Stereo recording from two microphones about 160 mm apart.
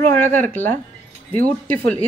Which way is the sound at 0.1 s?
10° left (ahead or behind).